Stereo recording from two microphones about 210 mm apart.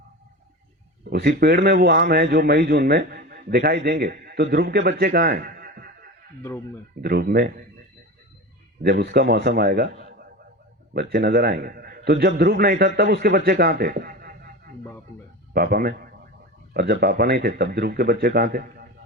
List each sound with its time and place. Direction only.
1.1 s a man's voice: 50° right (ahead or behind)
8.8 s a man's voice: 50° right (ahead or behind)